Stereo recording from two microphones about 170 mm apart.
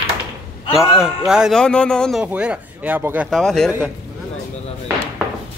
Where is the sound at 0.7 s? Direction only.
5° right (ahead or behind).